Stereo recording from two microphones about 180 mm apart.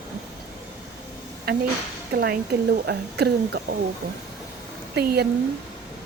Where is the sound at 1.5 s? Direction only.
60° right (ahead or behind).